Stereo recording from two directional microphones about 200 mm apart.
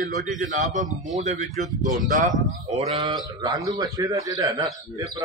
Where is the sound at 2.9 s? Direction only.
20° right (ahead or behind).